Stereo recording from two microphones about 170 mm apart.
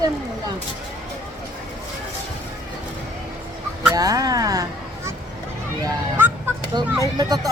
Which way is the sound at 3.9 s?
20° right (ahead or behind).